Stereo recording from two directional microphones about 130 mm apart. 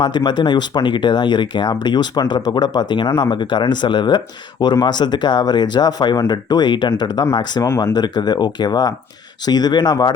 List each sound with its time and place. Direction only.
0.0 s speech: 35° left (ahead or behind)